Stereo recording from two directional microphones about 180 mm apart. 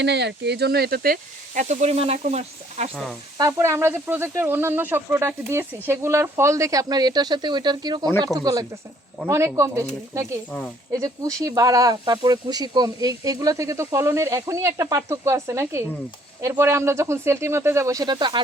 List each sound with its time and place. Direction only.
0.0 s speech: 70° right (ahead or behind); by 1.6 s 55° right (ahead or behind)
1.6 s speech: 35° right (ahead or behind)
3.3 s speech: 20° right (ahead or behind)